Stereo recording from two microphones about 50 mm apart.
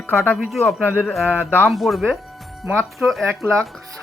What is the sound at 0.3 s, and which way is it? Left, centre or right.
Speech, centre.